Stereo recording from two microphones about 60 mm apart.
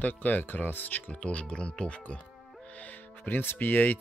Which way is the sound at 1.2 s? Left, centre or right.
Centre.